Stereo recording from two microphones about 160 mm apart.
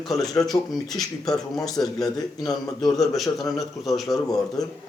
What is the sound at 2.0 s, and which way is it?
Speech, 25° left (ahead or behind).